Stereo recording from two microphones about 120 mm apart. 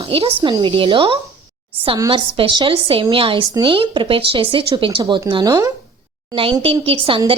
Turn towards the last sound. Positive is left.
turn(degrees=-45)  # may be behind; listen again after turning